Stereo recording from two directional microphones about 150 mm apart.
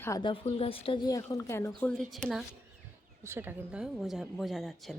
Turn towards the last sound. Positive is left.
turn(degrees=0)  # may be behind; listen again after turning